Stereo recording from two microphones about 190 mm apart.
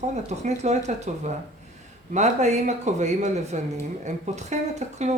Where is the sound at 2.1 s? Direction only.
35° right (ahead or behind).